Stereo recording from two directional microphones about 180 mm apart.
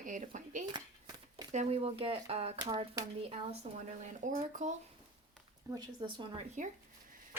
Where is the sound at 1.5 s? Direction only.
35° right (ahead or behind).